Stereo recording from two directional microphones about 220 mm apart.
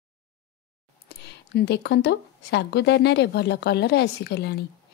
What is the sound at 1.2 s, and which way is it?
A woman's voice, 50° left (ahead or behind).